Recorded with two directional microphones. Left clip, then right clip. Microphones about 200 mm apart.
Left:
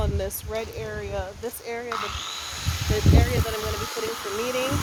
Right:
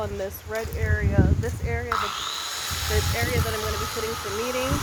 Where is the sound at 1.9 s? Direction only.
40° right (ahead or behind).